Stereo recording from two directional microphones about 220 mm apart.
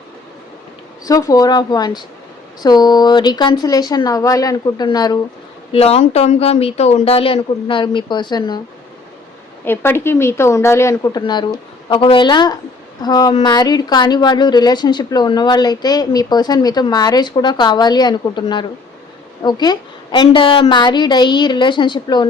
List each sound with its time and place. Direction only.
1.0 s a woman's voice: 15° left (ahead or behind)
9.6 s a woman's voice: 10° left (ahead or behind)